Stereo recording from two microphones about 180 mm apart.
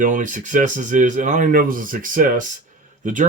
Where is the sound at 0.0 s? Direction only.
45° right (ahead or behind).